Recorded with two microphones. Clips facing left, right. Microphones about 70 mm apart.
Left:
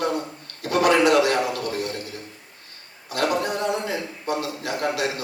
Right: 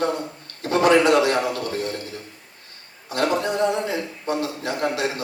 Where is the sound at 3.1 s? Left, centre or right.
Right.